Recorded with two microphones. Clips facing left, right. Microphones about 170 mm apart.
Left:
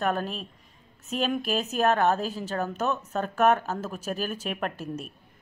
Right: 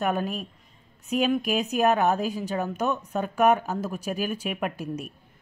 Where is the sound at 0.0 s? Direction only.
10° right (ahead or behind).